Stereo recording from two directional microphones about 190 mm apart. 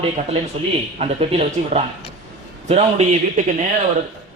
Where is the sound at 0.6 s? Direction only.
30° right (ahead or behind).